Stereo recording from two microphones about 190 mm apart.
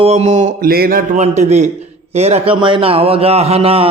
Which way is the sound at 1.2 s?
35° right (ahead or behind).